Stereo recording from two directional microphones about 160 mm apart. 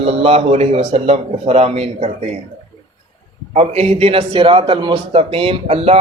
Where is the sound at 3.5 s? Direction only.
40° right (ahead or behind).